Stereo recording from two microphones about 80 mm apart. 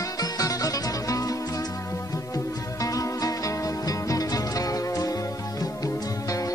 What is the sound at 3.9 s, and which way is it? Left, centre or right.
Music, left.